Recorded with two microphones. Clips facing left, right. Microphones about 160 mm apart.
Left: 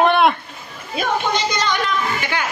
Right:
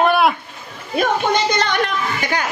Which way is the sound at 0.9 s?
55° right (ahead or behind).